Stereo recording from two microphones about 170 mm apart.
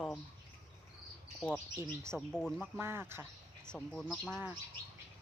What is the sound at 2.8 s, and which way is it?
Speech, 15° right (ahead or behind).